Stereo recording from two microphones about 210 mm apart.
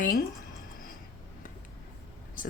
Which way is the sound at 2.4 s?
40° left (ahead or behind).